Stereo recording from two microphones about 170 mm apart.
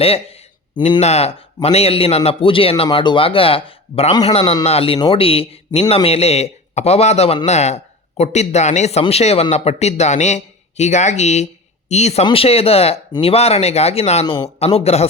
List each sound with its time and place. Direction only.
0.0 s a man's voice: 35° left (ahead or behind)